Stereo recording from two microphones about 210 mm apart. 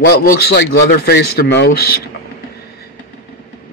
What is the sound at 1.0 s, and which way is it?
Speech, 50° left (ahead or behind).